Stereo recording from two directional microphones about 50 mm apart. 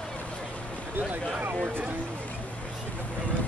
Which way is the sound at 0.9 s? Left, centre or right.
Right.